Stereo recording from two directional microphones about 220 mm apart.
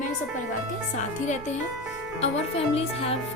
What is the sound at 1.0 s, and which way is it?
A woman's voice, 35° left (ahead or behind).